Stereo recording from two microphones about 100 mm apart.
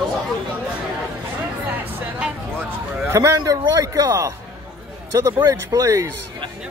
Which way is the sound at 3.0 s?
30° right (ahead or behind).